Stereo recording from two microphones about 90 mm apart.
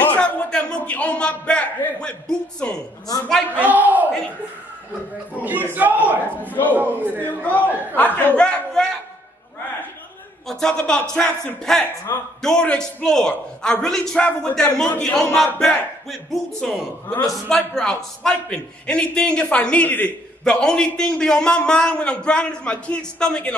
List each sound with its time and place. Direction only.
0.0 s a man's voice: 15° left (ahead or behind)
3.6 s a man's voice: 20° right (ahead or behind)
5.4 s a man's voice: 20° right (ahead or behind)
6.4 s a man's voice: 20° left (ahead or behind)
6.7 s a man's voice: 20° right (ahead or behind)
7.2 s a man's voice: 15° left (ahead or behind)
10.4 s a man's voice: 5° left (ahead or behind)
14.9 s a man's voice: 20° left (ahead or behind)
15.1 s a man's voice: 5° left (ahead or behind)